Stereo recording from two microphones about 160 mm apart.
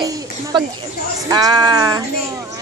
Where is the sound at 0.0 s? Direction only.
25° right (ahead or behind).